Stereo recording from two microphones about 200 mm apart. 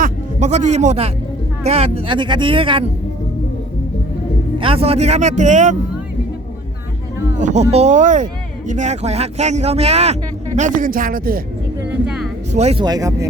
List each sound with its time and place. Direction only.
0.0 s music: 35° right (ahead or behind)
1.6 s speech: 30° right (ahead or behind)
4.5 s speech: 25° right (ahead or behind)
7.3 s speech: 35° right (ahead or behind)
11.8 s a sound: 5° right (ahead or behind)
12.5 s speech: 35° right (ahead or behind)
12.8 s speech: 20° right (ahead or behind)